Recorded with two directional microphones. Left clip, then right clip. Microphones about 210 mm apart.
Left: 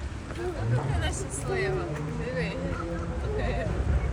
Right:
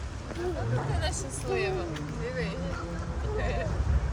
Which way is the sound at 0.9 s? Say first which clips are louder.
Even; 55° right (ahead or behind).